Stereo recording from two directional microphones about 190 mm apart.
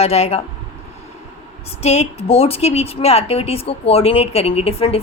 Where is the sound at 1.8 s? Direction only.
35° left (ahead or behind).